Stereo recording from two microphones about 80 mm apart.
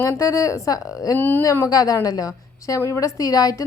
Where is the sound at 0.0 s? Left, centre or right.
Left.